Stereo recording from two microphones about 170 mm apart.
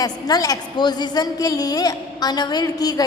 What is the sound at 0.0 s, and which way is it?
A woman's voice, 20° left (ahead or behind).